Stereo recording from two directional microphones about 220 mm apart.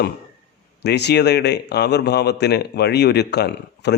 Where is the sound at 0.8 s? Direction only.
50° left (ahead or behind).